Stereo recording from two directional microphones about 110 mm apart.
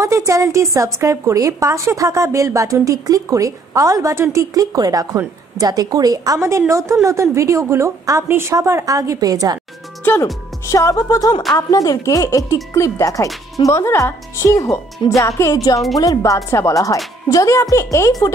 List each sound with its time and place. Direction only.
0.0 s a woman's voice: 30° right (ahead or behind)
10.7 s speech: 30° left (ahead or behind)